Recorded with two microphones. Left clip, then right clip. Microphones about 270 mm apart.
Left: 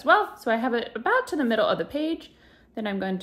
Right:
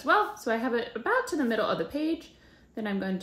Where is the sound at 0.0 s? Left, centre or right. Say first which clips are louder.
Left 4 dB; centre.